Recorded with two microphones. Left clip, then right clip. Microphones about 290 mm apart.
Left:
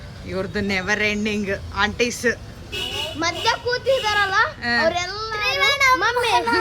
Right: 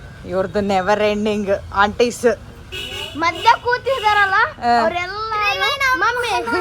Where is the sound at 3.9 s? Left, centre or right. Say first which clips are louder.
Right 1 dB; right.